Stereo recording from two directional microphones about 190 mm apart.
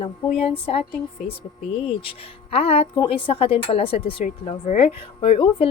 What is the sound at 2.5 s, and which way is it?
A woman's voice, 30° left (ahead or behind).